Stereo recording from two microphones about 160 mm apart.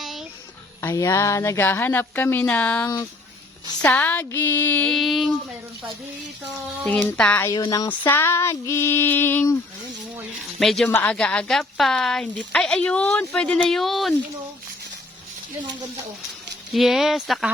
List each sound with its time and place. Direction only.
0.0 s music: centre (ahead or behind)
0.8 s speech: 15° left (ahead or behind); by 5.3 s centre (ahead or behind)
6.8 s speech: 5° left (ahead or behind)
7.5 s speech: 25° left (ahead or behind)
7.9 s speech: 15° left (ahead or behind)
10.6 s speech: centre (ahead or behind)
16.7 s speech: centre (ahead or behind)